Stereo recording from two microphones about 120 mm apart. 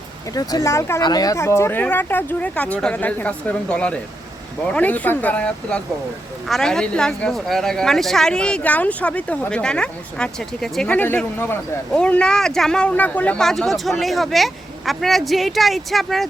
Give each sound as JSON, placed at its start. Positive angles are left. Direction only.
{"t": 0.3, "sound": "speech", "side_deg": 30}